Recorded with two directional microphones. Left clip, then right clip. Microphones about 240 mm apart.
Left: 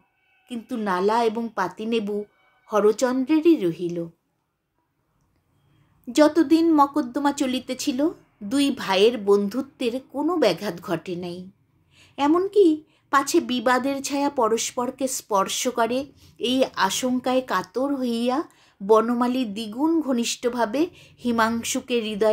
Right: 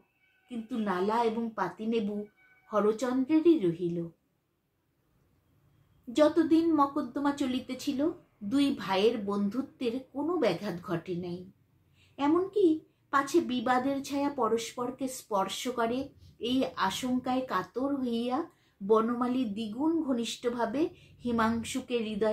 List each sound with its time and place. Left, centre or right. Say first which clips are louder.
0.5 s a woman's voice: left 7 dB; left
6.1 s a woman's voice: left 7 dB; left